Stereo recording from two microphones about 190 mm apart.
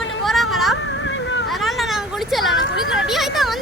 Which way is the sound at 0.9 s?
75° left (ahead or behind).